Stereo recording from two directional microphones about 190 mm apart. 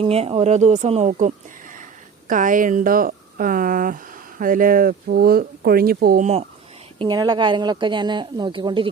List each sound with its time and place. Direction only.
0.0 s a woman's voice: 30° right (ahead or behind); by 6.2 s 50° right (ahead or behind)
7.0 s speech: 20° right (ahead or behind)